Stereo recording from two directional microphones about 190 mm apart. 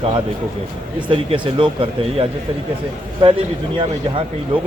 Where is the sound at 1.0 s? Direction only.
30° right (ahead or behind).